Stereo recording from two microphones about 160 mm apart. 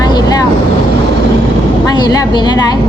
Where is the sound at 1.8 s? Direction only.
25° left (ahead or behind).